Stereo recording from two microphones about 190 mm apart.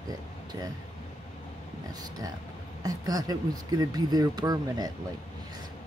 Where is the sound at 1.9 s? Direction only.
20° right (ahead or behind).